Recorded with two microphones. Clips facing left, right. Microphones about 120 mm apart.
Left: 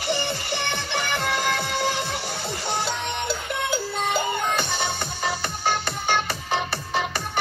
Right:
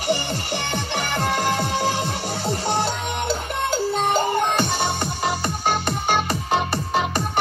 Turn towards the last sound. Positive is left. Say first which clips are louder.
# right 4 dB
turn(degrees=-15)  # may be behind; listen again after turning